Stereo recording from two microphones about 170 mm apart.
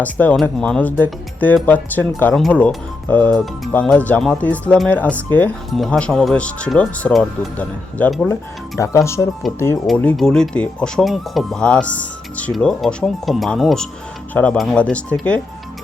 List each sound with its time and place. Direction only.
0.0 s speech: 10° left (ahead or behind)
8.8 s speech: 15° left (ahead or behind)
9.8 s speech: 5° left (ahead or behind)